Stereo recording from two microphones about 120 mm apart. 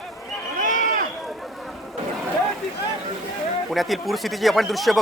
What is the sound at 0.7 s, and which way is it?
Run, 90° right.